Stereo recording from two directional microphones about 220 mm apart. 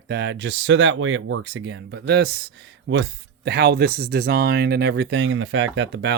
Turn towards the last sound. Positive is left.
turn(degrees=-55)  # may be behind; listen again after turning